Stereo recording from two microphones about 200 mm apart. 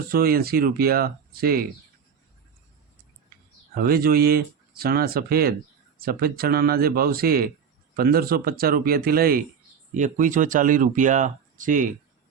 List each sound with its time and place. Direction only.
0.1 s speech: 50° right (ahead or behind)
3.8 s speech: 50° right (ahead or behind)